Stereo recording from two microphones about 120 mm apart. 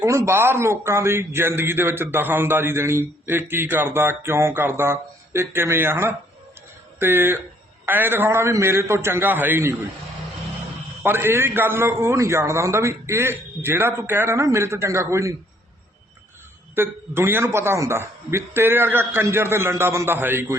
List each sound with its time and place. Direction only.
0.0 s a man's voice: 25° right (ahead or behind)
11.0 s a man's voice: 20° right (ahead or behind)
16.7 s a man's voice: 20° right (ahead or behind)